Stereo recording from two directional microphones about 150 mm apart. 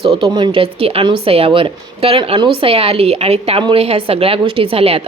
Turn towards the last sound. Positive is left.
turn(degrees=-40)  # may be behind; listen again after turning